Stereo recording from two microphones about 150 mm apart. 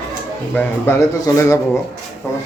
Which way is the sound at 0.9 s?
15° left (ahead or behind).